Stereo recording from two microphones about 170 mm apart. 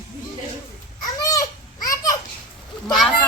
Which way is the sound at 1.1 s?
20° left (ahead or behind).